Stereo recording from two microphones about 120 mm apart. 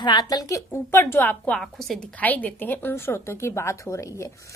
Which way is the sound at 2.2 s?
15° left (ahead or behind).